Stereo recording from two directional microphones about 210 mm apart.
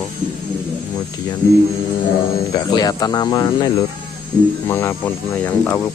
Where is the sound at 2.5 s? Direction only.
20° left (ahead or behind).